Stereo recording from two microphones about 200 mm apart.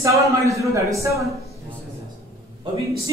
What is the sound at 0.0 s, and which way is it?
Speech, 15° right (ahead or behind).